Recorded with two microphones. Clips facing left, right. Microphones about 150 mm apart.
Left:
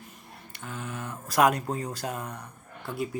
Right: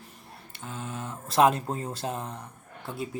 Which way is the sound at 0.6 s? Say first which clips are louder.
Even; 25° right (ahead or behind).